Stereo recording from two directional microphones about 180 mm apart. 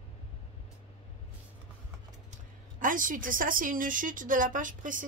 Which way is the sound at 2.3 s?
50° right (ahead or behind).